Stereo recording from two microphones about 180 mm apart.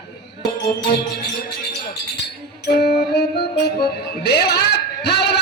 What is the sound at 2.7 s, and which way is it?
Speech, 60° left (ahead or behind).